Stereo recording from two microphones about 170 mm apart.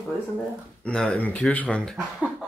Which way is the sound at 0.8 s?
5° left (ahead or behind).